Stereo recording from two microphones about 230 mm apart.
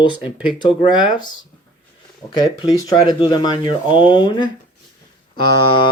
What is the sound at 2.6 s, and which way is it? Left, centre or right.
Speech, centre.